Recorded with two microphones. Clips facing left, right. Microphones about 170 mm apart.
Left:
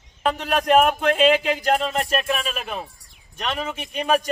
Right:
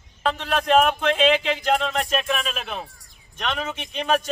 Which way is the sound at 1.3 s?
45° left (ahead or behind).